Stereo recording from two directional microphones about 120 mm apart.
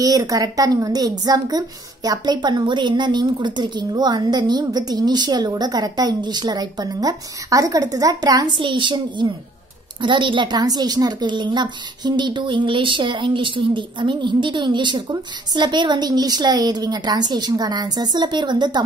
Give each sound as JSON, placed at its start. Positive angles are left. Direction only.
{"t": 0.0, "sound": "a woman's voice", "side_deg": -30}
{"t": 8.5, "sound": "a woman's voice", "side_deg": -45}